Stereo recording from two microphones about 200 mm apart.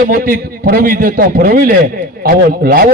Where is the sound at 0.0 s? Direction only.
45° right (ahead or behind).